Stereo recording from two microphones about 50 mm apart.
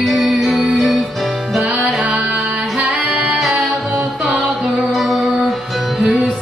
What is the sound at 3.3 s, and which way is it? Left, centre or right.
Music, centre.